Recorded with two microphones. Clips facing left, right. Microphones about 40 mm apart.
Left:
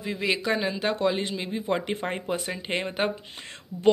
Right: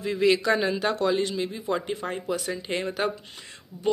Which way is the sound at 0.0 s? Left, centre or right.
Centre.